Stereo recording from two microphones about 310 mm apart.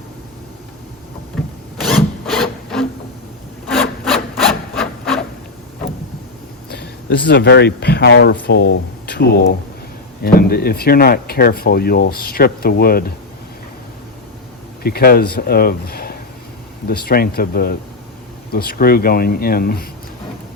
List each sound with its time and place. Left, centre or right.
1.8 s rub: centre
4.0 s wood: centre
6.7 s speech: left
14.8 s speech: left